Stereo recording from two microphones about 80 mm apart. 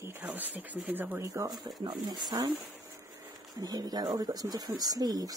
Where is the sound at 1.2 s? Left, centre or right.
Right.